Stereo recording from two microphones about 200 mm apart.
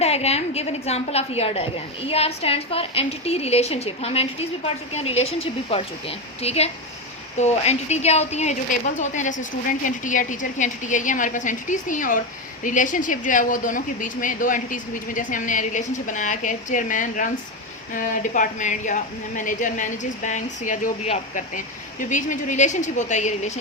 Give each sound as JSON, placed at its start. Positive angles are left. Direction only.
{"t": 0.0, "sound": "a woman's voice", "side_deg": 30}